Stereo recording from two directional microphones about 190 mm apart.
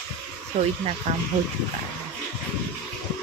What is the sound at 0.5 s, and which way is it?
Speech, 30° right (ahead or behind).